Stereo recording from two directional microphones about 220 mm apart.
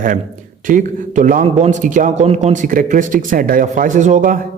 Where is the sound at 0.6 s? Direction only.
40° right (ahead or behind).